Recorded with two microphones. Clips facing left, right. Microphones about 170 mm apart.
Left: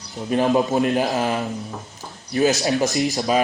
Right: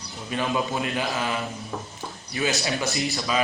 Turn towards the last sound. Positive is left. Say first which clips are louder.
# left 6 dB
turn(degrees=40)  # may be behind; listen again after turning